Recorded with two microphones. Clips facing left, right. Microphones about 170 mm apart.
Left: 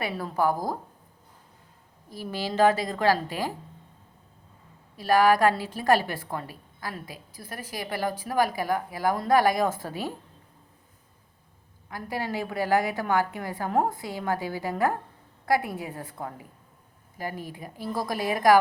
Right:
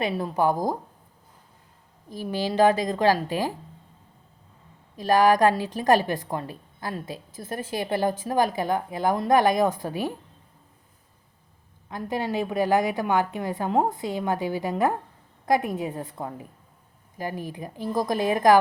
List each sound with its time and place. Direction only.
0.0 s a woman's voice: 15° right (ahead or behind)
2.0 s a woman's voice: 15° right (ahead or behind)
4.9 s a woman's voice: 20° right (ahead or behind)
11.9 s a woman's voice: 20° right (ahead or behind)